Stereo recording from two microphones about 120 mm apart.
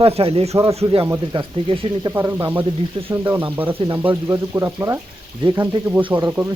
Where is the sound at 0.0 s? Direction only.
55° right (ahead or behind).